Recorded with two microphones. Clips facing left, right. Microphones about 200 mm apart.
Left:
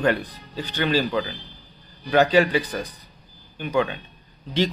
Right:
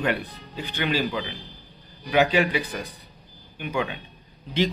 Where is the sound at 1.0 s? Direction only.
Centre (ahead or behind).